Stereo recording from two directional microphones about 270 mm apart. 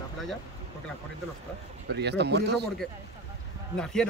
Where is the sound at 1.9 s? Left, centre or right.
Right.